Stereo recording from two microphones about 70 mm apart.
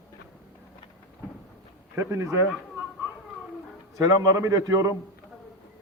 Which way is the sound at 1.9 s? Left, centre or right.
Right.